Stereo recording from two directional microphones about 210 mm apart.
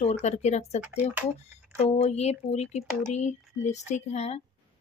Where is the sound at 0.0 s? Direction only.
30° left (ahead or behind).